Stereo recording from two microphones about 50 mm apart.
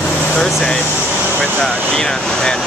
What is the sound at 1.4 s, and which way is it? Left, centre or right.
Speech, centre.